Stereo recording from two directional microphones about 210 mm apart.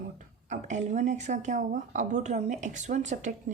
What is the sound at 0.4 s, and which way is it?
Speech, 35° right (ahead or behind).